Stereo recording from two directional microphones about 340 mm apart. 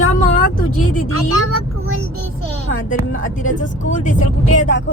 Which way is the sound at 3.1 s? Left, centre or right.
Left.